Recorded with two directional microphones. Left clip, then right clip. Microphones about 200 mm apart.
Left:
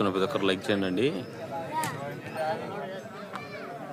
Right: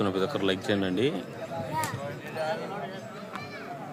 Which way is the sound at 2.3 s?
50° right (ahead or behind).